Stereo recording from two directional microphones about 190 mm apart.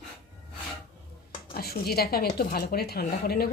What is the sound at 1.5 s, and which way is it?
A woman's voice, 55° left (ahead or behind).